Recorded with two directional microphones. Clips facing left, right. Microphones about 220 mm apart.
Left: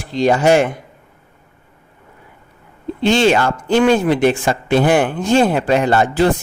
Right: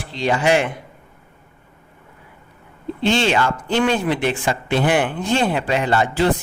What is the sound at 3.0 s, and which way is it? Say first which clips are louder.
A man's voice: left 5 dB; 45° left (ahead or behind).